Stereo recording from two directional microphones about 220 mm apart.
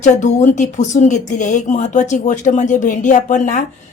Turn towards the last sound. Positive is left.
turn(degrees=35)  # may be behind; listen again after turning